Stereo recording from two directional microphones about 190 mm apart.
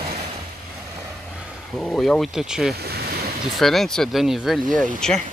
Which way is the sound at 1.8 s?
5° left (ahead or behind).